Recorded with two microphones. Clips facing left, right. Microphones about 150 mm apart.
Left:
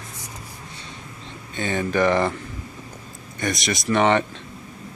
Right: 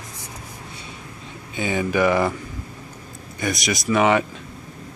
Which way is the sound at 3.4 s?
Centre (ahead or behind).